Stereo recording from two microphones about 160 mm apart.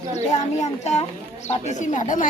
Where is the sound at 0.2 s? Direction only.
45° left (ahead or behind).